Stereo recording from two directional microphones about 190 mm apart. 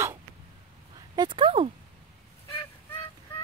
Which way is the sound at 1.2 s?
25° right (ahead or behind).